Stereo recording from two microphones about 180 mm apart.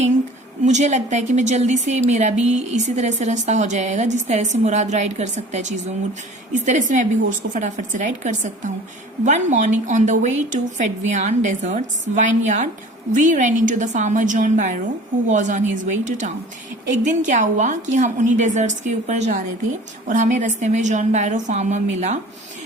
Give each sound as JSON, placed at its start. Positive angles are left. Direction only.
{"t": 0.6, "sound": "a woman's voice", "side_deg": -40}